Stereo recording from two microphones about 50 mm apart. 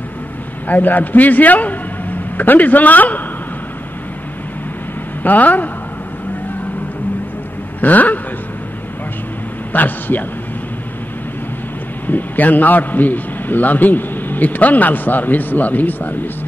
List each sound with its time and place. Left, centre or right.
0.7 s a man's voice: left
5.2 s a man's voice: left
7.8 s a man's voice: left
9.7 s speech: left
12.1 s a man's voice: left